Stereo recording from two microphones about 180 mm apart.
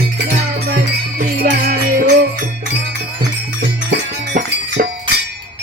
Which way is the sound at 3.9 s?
70° right (ahead or behind).